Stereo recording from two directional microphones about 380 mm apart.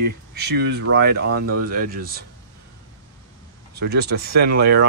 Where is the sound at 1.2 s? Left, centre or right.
Right.